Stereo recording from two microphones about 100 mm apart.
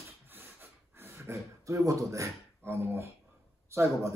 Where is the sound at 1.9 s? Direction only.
30° right (ahead or behind).